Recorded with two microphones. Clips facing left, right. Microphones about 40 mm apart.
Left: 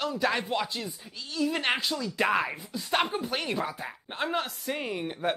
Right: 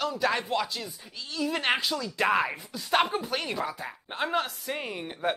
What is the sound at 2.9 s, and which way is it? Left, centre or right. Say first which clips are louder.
Speech: right 3 dB; centre.